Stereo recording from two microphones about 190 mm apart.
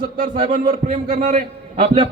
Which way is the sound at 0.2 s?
50° right (ahead or behind).